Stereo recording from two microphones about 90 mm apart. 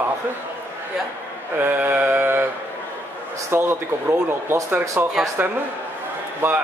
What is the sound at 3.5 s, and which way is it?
Mantra, 25° right (ahead or behind).